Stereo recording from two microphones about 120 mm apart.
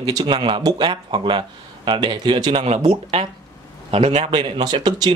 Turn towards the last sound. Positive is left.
turn(degrees=-35)  # may be behind; listen again after turning